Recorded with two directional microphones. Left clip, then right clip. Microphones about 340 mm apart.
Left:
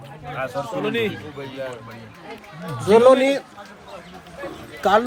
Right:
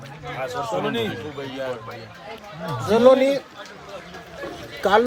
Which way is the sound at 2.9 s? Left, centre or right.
Left.